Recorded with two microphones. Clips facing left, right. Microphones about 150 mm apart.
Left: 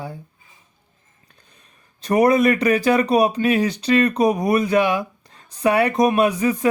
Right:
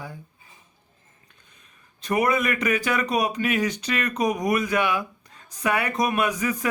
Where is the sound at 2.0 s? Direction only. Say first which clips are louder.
Left 7 dB; 35° left (ahead or behind).